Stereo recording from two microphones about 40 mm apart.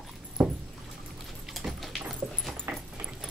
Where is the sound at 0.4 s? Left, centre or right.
Right.